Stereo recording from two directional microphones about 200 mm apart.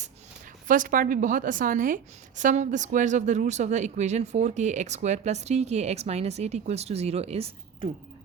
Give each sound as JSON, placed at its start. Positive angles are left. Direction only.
{"t": 0.7, "sound": "a woman's voice", "side_deg": -40}